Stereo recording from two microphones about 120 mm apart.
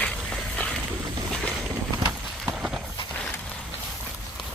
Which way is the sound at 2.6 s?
Centre (ahead or behind).